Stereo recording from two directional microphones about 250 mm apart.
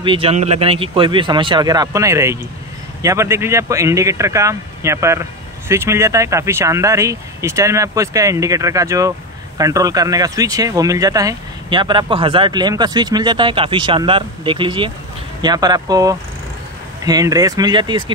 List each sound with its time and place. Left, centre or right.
0.0 s speech: right